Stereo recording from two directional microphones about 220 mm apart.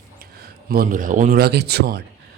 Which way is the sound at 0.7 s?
40° right (ahead or behind).